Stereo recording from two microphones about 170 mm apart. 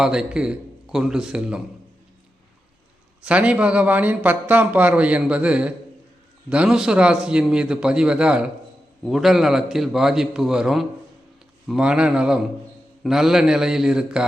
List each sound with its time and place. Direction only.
0.0 s a man's voice: 5° right (ahead or behind)
3.2 s a man's voice: 5° right (ahead or behind)